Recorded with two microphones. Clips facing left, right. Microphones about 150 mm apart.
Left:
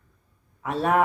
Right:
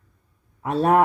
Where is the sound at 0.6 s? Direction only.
40° right (ahead or behind).